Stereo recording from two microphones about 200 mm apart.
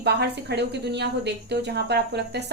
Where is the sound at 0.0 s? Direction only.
55° right (ahead or behind).